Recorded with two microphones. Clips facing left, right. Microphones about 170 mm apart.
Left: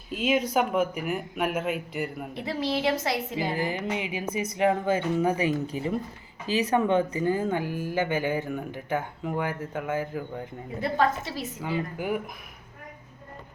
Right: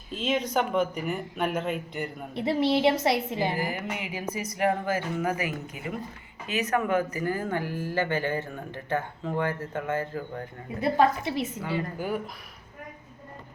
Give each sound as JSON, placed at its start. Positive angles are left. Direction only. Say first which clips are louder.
{"t": 0.1, "sound": "speech", "louder": "left 2 dB", "side_deg": 10}
{"t": 2.3, "sound": "a woman's voice", "louder": "right 6 dB", "side_deg": -25}
{"t": 3.6, "sound": "speech", "louder": "left 3 dB", "side_deg": 20}
{"t": 10.8, "sound": "a woman's voice", "louder": "right 2 dB", "side_deg": -15}
{"t": 11.9, "sound": "speech", "louder": "left 1 dB", "side_deg": 15}